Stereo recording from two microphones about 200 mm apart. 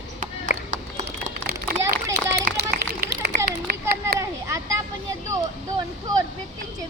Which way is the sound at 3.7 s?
50° right (ahead or behind).